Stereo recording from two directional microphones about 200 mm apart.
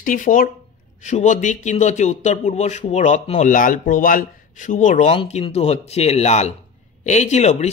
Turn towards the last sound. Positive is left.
turn(degrees=35)  # may be behind; listen again after turning